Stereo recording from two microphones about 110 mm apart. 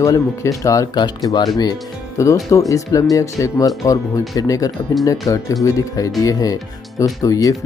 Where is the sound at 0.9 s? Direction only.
40° left (ahead or behind).